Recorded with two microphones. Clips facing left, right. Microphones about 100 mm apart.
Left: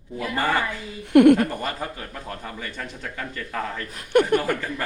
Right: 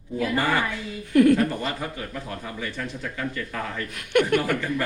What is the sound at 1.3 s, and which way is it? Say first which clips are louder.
Speech: even; 35° left (ahead or behind).